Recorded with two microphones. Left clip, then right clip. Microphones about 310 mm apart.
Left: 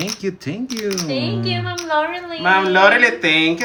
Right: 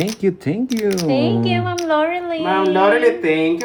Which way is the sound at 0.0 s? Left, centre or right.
Centre.